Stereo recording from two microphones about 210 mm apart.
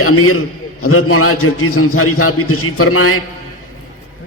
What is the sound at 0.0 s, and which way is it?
A man's voice, 90° left.